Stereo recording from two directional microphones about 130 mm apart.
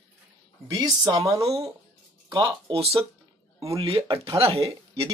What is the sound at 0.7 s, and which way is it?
Speech, 30° right (ahead or behind).